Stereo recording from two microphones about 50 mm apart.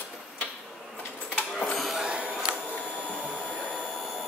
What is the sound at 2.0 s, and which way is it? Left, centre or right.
Printer, right.